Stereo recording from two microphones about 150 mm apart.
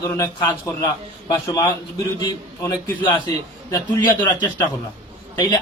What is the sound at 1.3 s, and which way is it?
A man's voice, 25° left (ahead or behind).